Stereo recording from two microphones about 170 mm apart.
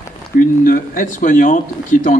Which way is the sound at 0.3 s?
55° left (ahead or behind).